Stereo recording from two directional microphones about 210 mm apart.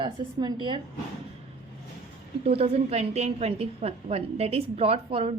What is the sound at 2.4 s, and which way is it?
A woman's voice, 30° right (ahead or behind).